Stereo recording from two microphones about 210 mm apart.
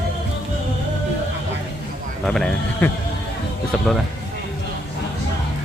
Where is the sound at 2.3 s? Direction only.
5° left (ahead or behind).